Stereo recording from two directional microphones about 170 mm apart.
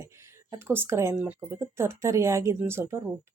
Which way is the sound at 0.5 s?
15° right (ahead or behind).